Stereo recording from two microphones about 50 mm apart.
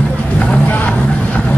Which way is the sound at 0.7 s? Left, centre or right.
Left.